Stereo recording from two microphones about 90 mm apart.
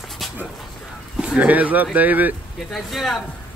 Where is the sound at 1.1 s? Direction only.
10° right (ahead or behind).